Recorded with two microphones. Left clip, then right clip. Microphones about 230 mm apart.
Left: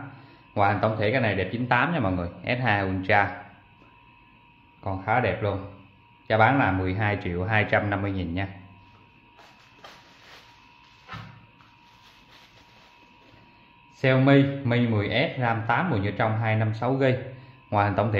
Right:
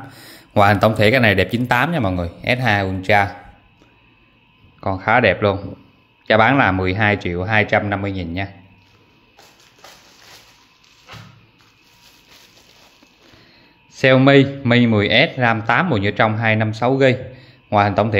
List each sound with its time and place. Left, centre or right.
0.6 s speech: right
4.7 s speech: right
13.9 s speech: right